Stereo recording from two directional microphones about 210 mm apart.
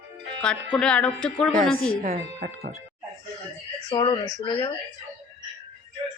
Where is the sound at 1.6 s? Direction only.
75° right (ahead or behind).